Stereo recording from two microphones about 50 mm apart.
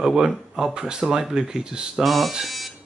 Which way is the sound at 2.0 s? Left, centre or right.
Centre.